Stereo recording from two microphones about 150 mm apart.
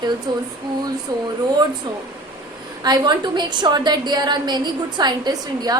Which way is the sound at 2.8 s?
30° right (ahead or behind).